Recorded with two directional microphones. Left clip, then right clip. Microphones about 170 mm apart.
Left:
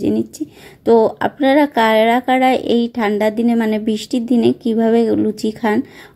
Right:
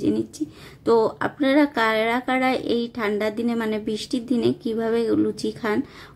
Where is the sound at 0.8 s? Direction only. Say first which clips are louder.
Left 7 dB; 20° left (ahead or behind).